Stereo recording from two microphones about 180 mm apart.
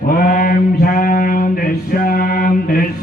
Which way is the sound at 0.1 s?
50° left (ahead or behind).